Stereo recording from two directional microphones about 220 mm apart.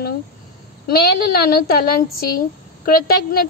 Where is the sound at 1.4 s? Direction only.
45° left (ahead or behind).